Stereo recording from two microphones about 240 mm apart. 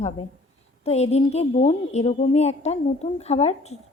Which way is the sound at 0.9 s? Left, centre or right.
Left.